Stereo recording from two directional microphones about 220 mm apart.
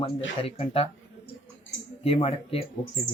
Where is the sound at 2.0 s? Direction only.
25° left (ahead or behind).